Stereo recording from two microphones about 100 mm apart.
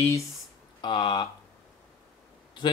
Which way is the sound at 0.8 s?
50° left (ahead or behind).